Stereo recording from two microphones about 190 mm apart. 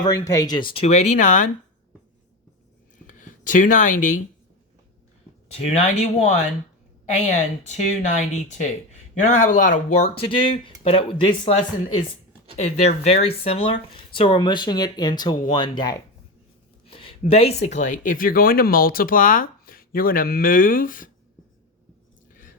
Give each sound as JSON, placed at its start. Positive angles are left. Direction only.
{"t": 0.0, "sound": "speech", "side_deg": 20}
{"t": 3.1, "sound": "speech", "side_deg": 40}
{"t": 5.7, "sound": "speech", "side_deg": 35}
{"t": 12.6, "sound": "speech", "side_deg": 35}